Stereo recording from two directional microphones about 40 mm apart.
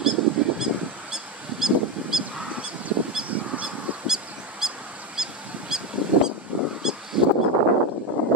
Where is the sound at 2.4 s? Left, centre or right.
Right.